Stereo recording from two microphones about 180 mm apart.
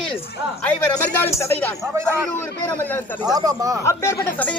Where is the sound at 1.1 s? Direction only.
10° left (ahead or behind).